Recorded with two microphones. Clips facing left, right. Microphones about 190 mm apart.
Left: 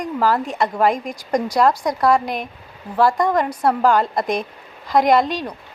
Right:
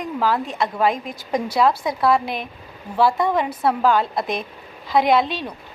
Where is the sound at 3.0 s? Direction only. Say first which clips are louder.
Left 2 dB; 5° right (ahead or behind).